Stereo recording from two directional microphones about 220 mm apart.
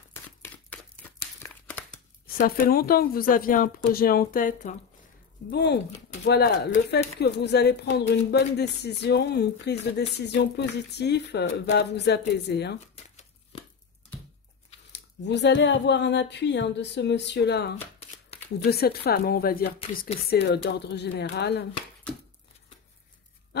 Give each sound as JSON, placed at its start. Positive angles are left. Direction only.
{"t": 0.1, "sound": "crumpling", "side_deg": 5}
{"t": 2.2, "sound": "speech", "side_deg": 40}
{"t": 5.5, "sound": "a woman's voice", "side_deg": 50}
{"t": 12.9, "sound": "crumpling", "side_deg": 25}
{"t": 14.9, "sound": "a woman's voice", "side_deg": 50}
{"t": 22.1, "sound": "a sound", "side_deg": 5}
{"t": 23.5, "sound": "a sound", "side_deg": 50}